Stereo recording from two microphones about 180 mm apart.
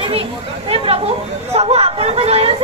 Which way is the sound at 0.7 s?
30° right (ahead or behind).